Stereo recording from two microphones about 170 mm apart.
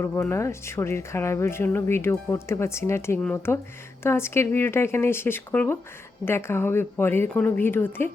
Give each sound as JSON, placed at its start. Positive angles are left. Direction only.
{"t": 0.0, "sound": "speech", "side_deg": 15}